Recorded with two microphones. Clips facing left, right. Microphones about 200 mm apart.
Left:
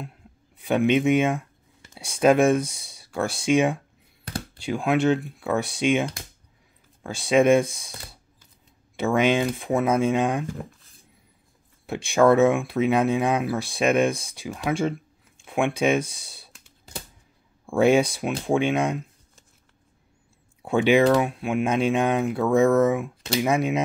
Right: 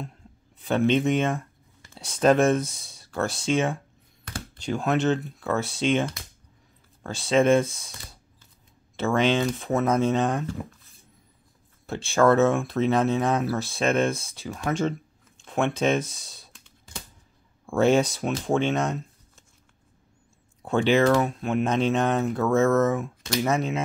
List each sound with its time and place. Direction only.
0.0 s speech: 10° left (ahead or behind)
8.9 s speech: 10° left (ahead or behind)
11.8 s speech: 15° left (ahead or behind)
17.6 s speech: 10° left (ahead or behind)
20.6 s speech: 15° left (ahead or behind)